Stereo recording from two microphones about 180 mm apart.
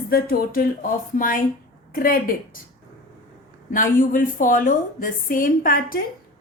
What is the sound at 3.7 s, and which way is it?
A woman's voice, 45° left (ahead or behind).